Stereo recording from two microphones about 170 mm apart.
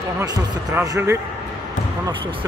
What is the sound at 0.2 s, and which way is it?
Speech, 20° right (ahead or behind).